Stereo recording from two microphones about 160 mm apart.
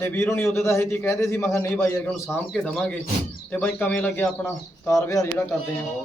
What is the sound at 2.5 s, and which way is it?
A man's voice, centre (ahead or behind).